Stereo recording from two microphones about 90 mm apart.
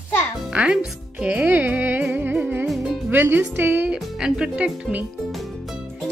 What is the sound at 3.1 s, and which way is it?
Speech, 20° right (ahead or behind).